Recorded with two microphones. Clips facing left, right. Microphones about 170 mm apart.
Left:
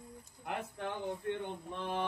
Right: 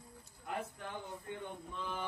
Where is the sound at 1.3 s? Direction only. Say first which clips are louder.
Left 6 dB; 65° left (ahead or behind).